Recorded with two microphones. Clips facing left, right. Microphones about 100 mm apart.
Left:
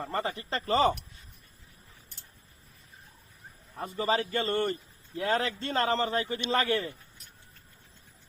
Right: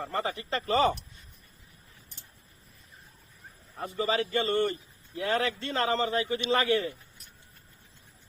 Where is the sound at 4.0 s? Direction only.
40° left (ahead or behind).